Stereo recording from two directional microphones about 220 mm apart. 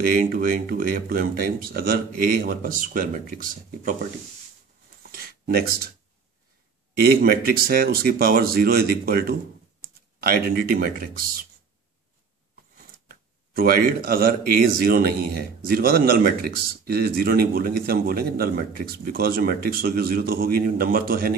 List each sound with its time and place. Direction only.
0.0 s speech: 40° right (ahead or behind)
5.1 s a sound: 45° right (ahead or behind)
7.0 s speech: 45° right (ahead or behind)
13.1 s speech: 40° right (ahead or behind)